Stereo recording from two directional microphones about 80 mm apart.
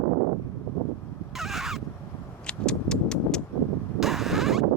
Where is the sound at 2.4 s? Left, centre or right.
Centre.